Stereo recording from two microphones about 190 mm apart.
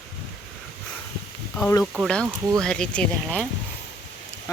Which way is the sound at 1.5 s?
15° left (ahead or behind).